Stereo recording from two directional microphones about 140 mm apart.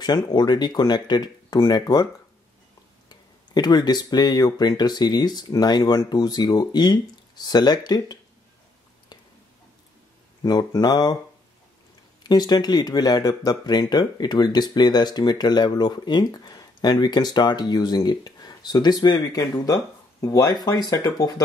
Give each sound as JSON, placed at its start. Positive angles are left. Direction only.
{"t": 0.0, "sound": "speech", "side_deg": 30}
{"t": 3.1, "sound": "speech", "side_deg": 30}
{"t": 10.4, "sound": "speech", "side_deg": 30}
{"t": 12.2, "sound": "speech", "side_deg": 30}